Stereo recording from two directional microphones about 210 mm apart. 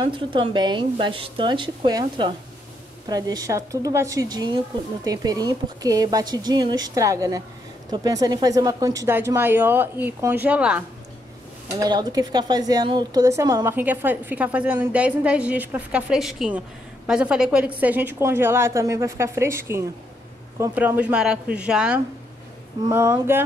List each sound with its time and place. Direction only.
0.0 s a woman's voice: 25° right (ahead or behind); by 10.8 s 5° right (ahead or behind)
11.7 s a woman's voice: 20° right (ahead or behind)